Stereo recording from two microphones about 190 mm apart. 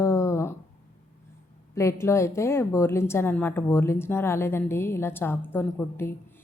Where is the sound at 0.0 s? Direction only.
15° left (ahead or behind).